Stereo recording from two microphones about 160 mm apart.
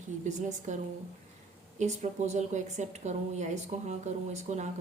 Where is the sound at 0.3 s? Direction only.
50° right (ahead or behind).